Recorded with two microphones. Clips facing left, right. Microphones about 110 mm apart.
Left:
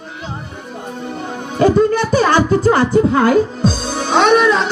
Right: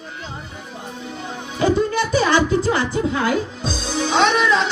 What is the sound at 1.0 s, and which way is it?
Speech, 50° left (ahead or behind).